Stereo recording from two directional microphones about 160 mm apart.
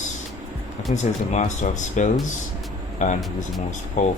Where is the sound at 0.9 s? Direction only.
50° left (ahead or behind).